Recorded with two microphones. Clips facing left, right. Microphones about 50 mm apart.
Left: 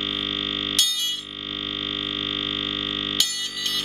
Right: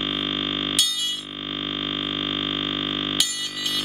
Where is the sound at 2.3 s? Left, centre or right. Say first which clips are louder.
Right 2 dB; centre.